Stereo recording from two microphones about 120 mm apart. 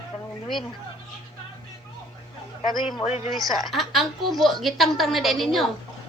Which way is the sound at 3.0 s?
65° left (ahead or behind).